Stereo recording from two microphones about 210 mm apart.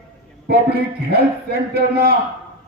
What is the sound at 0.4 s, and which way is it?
A man's voice, 50° right (ahead or behind).